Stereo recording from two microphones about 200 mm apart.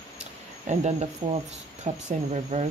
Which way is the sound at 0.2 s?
35° right (ahead or behind).